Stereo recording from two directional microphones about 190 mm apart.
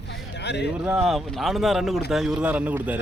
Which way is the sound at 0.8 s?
5° right (ahead or behind).